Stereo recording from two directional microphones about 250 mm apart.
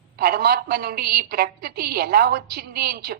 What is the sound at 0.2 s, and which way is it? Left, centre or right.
A woman's voice, right.